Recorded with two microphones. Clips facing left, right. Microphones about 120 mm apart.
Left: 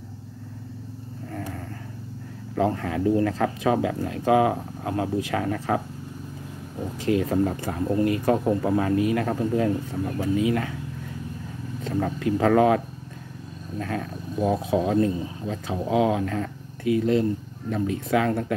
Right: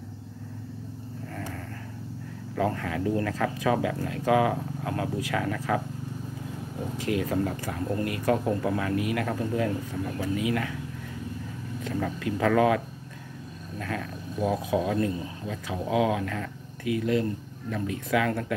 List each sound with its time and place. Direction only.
2.5 s speech: 30° left (ahead or behind)
7.0 s speech: 30° left (ahead or behind)
11.8 s speech: 35° left (ahead or behind)